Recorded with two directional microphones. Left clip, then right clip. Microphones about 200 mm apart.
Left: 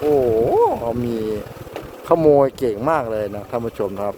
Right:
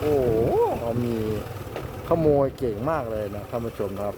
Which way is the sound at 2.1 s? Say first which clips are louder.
Left 7 dB; 30° left (ahead or behind).